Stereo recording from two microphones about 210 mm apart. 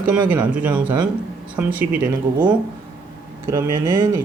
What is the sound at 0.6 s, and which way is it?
Speech, 5° right (ahead or behind).